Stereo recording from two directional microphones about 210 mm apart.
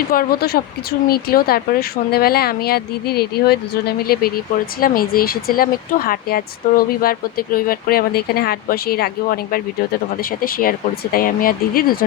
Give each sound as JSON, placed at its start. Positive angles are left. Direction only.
{"t": 0.1, "sound": "speech", "side_deg": 45}